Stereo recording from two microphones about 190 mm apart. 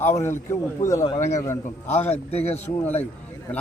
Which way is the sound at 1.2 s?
40° left (ahead or behind).